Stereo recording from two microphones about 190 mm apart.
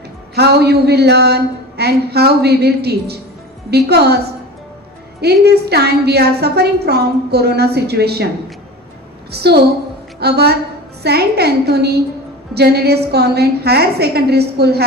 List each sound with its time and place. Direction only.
0.3 s a woman's voice: 60° right (ahead or behind)
5.2 s a woman's voice: 60° right (ahead or behind)
9.3 s a woman's voice: 60° right (ahead or behind)